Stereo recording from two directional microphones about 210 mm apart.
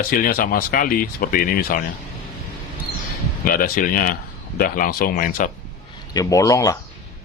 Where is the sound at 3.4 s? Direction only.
40° left (ahead or behind).